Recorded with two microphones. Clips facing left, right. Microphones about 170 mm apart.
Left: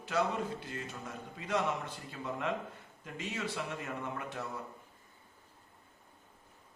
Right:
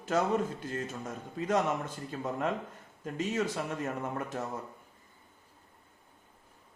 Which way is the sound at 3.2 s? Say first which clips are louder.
Right 6 dB; 45° right (ahead or behind).